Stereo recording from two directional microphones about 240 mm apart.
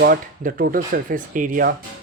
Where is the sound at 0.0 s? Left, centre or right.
Right.